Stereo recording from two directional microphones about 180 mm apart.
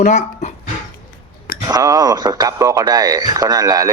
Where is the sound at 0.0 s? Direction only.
40° left (ahead or behind).